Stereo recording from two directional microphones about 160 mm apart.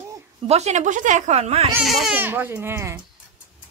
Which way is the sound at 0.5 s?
45° right (ahead or behind).